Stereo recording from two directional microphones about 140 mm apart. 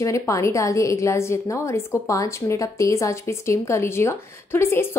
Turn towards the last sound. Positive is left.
turn(degrees=20)  # may be behind; listen again after turning